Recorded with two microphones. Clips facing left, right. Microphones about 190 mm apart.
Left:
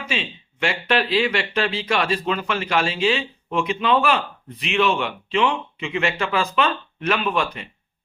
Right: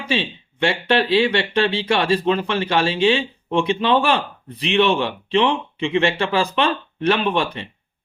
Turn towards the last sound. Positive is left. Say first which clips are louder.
# right 3 dB
turn(degrees=-30)  # may be behind; listen again after turning